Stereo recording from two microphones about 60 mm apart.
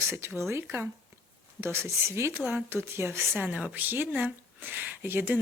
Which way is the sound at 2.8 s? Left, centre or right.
Right.